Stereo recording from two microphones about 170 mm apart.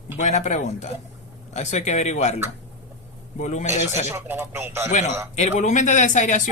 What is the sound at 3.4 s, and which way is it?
Speech, 45° left (ahead or behind).